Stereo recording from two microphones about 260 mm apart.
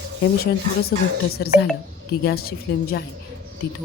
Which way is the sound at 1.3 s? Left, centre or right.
Left.